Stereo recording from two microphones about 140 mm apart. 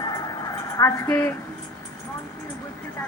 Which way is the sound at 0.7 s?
20° left (ahead or behind).